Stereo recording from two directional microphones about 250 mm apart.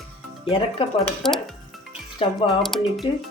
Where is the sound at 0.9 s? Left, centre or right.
Centre.